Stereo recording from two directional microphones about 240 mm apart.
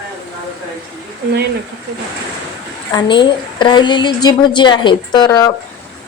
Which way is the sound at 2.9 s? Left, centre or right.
Centre.